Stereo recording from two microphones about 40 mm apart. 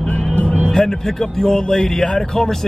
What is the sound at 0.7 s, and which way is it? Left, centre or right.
Speech, centre.